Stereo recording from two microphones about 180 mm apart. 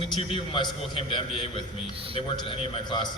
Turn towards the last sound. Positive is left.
turn(degrees=25)  # may be behind; listen again after turning